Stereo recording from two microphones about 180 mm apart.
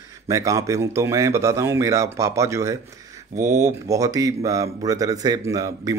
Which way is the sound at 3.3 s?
40° right (ahead or behind).